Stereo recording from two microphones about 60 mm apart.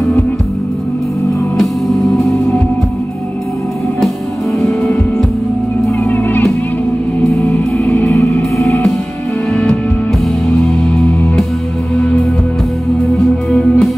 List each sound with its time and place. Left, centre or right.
4.6 s music: centre
6.0 s music: left
7.9 s music: left
9.5 s music: centre
13.5 s music: centre